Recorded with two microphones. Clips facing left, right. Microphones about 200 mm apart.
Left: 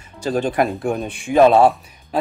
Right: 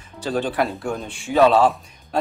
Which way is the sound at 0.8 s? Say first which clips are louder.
Left 5 dB; 20° left (ahead or behind).